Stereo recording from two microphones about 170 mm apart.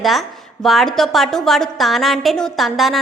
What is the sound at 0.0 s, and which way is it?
A woman's voice, centre (ahead or behind).